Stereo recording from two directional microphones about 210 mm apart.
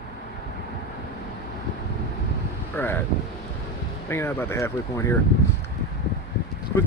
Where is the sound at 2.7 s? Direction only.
10° left (ahead or behind).